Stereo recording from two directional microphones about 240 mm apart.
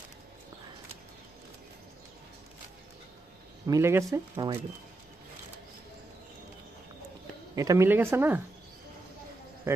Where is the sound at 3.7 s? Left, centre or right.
Centre.